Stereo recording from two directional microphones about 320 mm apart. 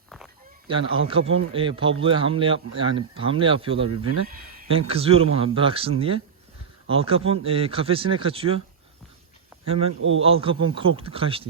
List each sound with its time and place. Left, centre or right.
0.7 s speech: centre
3.9 s speech: right
4.9 s speech: centre
9.6 s speech: centre
10.0 s speech: right
10.2 s speech: centre